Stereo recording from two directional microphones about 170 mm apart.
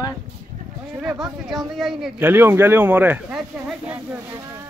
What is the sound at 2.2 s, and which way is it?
Speech, 15° right (ahead or behind).